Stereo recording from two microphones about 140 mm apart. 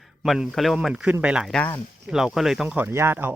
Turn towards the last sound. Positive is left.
turn(degrees=-15)  # may be behind; listen again after turning